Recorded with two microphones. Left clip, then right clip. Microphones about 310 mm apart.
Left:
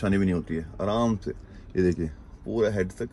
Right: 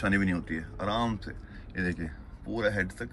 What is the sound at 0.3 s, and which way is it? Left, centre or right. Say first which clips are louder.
Speech: left 3 dB; left.